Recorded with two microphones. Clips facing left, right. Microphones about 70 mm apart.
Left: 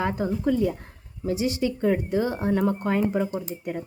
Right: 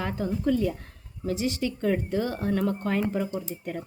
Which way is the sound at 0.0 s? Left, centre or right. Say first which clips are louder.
Left 3 dB; left.